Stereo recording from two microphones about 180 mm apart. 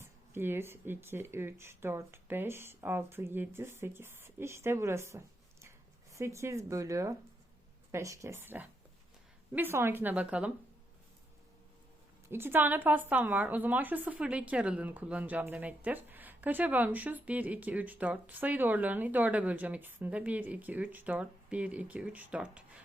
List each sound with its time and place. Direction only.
0.0 s a woman's voice: 10° right (ahead or behind)
12.3 s a woman's voice: 10° right (ahead or behind)